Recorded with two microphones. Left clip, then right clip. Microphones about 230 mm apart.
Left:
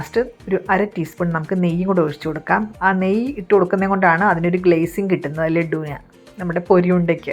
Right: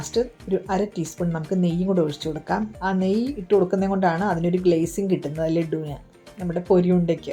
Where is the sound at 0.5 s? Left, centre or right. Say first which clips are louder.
Left 7 dB; left.